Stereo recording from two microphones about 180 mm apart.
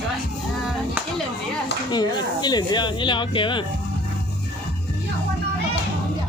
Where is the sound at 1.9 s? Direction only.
25° left (ahead or behind).